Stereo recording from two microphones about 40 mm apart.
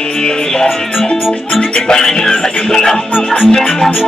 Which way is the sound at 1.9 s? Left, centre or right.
Centre.